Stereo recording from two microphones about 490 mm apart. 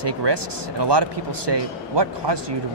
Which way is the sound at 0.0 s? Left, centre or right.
Right.